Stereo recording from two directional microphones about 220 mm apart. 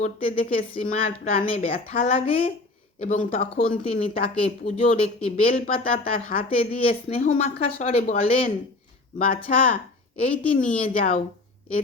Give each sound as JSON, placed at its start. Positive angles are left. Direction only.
{"t": 0.0, "sound": "speech", "side_deg": 40}
{"t": 1.4, "sound": "a woman's voice", "side_deg": 25}
{"t": 5.7, "sound": "a woman's voice", "side_deg": 25}
{"t": 9.1, "sound": "speech", "side_deg": 40}